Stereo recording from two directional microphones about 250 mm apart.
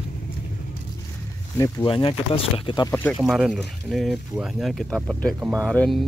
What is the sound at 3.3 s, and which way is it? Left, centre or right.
Speech, centre.